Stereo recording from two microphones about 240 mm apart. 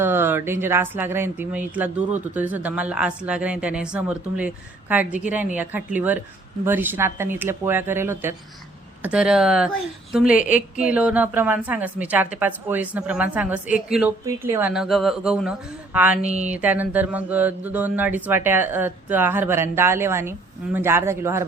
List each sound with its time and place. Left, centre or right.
0.0 s a woman's voice: centre
16.2 s speech: right
16.5 s speech: centre